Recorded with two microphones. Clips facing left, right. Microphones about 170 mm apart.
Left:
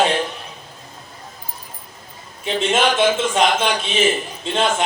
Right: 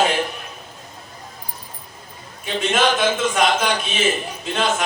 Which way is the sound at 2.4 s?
25° left (ahead or behind).